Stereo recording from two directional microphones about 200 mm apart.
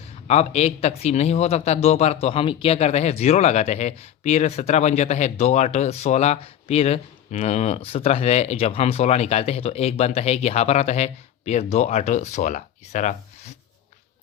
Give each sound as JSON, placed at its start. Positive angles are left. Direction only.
{"t": 0.3, "sound": "a man's voice", "side_deg": 35}